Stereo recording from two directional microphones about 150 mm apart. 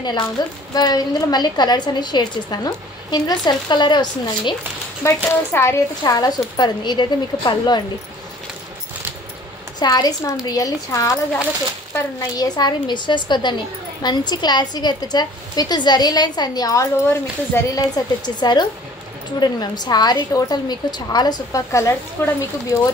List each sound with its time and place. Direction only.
0.4 s a woman's voice: 30° left (ahead or behind)
5.0 s a woman's voice: 15° left (ahead or behind)
9.8 s a woman's voice: 25° left (ahead or behind)